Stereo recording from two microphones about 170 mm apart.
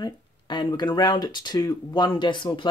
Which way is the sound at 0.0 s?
25° left (ahead or behind).